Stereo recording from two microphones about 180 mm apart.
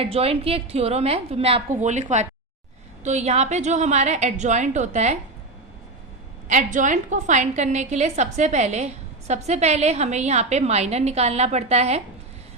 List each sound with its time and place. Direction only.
0.0 s a woman's voice: 35° right (ahead or behind)
6.5 s a woman's voice: 45° right (ahead or behind)